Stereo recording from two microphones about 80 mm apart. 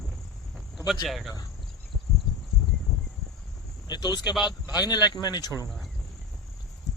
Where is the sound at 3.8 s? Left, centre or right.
Left.